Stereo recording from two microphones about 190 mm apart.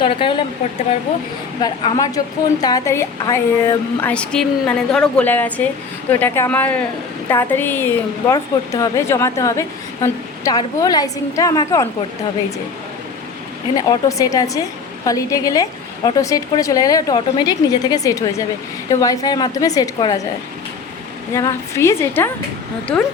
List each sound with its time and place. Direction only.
0.0 s speech: 25° left (ahead or behind)
1.6 s a woman's voice: 20° left (ahead or behind)
13.7 s a woman's voice: 20° left (ahead or behind)
21.3 s a woman's voice: 15° left (ahead or behind)